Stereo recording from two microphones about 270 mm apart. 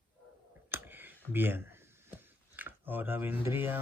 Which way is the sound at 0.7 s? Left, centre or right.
Centre.